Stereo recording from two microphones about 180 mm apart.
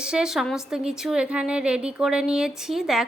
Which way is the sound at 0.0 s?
5° right (ahead or behind).